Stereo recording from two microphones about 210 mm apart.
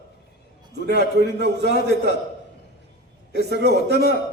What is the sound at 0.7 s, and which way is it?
Speech, 50° right (ahead or behind).